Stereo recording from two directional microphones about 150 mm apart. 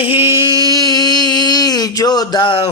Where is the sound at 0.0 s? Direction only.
35° left (ahead or behind).